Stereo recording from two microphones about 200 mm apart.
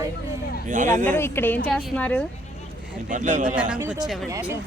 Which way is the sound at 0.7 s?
40° right (ahead or behind).